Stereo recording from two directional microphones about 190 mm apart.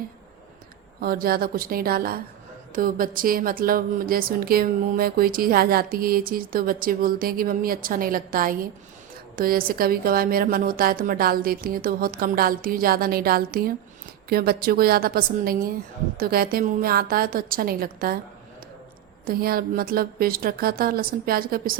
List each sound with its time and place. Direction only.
1.0 s a woman's voice: 50° right (ahead or behind)
19.2 s a woman's voice: 50° right (ahead or behind)